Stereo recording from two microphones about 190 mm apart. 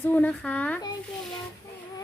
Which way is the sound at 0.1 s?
10° left (ahead or behind).